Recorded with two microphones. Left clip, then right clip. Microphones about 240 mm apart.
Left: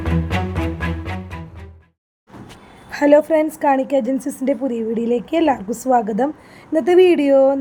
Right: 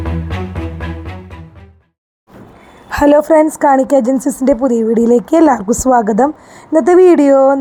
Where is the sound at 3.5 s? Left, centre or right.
Centre.